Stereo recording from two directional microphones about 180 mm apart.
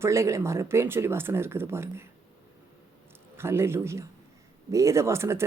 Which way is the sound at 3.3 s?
15° right (ahead or behind).